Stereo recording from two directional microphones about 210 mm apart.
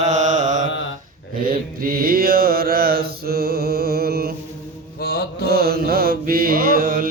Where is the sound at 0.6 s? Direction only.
65° left (ahead or behind).